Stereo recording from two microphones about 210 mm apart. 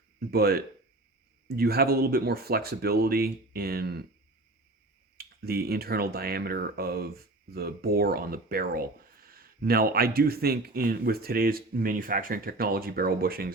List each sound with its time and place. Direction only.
0.3 s speech: 45° right (ahead or behind)
5.1 s speech: 45° right (ahead or behind)